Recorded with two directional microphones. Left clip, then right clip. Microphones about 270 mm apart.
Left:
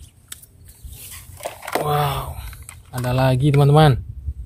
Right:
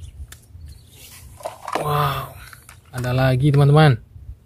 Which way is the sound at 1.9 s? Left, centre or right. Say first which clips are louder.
Right 1 dB; centre.